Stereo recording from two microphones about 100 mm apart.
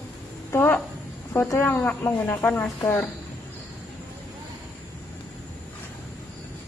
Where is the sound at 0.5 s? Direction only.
25° left (ahead or behind).